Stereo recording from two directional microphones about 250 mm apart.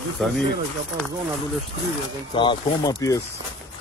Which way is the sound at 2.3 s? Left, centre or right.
Centre.